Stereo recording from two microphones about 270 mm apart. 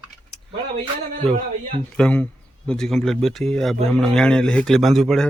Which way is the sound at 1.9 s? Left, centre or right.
Centre.